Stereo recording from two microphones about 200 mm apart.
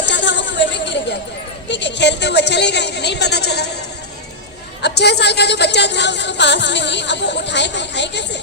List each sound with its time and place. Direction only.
0.0 s chatter: 60° left (ahead or behind)
1.7 s a woman's voice: 60° left (ahead or behind)
4.8 s a woman's voice: 55° left (ahead or behind)